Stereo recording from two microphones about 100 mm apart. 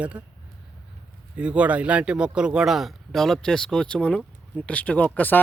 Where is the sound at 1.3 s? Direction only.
10° right (ahead or behind); by 5.4 s 15° left (ahead or behind).